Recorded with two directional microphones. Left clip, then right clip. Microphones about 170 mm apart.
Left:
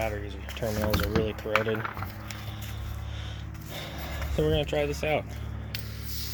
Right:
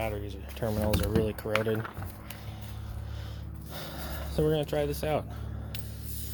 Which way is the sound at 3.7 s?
20° right (ahead or behind).